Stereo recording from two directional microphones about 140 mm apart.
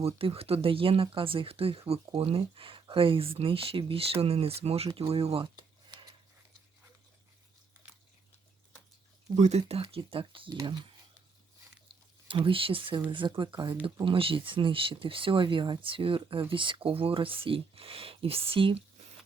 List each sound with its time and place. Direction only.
0.0 s speech: 45° right (ahead or behind)
5.1 s a sound: 45° right (ahead or behind)
9.3 s speech: 50° right (ahead or behind); by 10.8 s 30° right (ahead or behind)
12.3 s speech: 40° right (ahead or behind)